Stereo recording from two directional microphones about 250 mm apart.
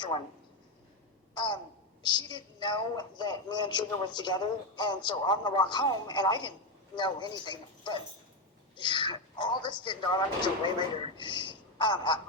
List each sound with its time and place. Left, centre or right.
1.3 s a woman's voice: centre